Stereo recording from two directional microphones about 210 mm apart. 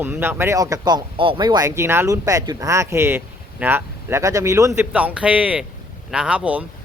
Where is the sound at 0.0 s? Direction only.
10° right (ahead or behind).